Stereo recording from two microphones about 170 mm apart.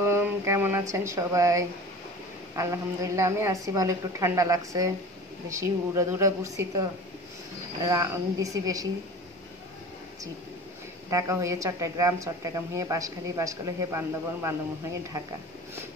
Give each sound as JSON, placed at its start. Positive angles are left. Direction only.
{"t": 0.0, "sound": "a woman's voice", "side_deg": -15}
{"t": 7.8, "sound": "speech", "side_deg": -20}
{"t": 11.1, "sound": "speech", "side_deg": -20}